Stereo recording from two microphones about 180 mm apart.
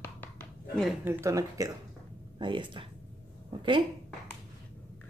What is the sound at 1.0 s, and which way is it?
Speech, 15° right (ahead or behind).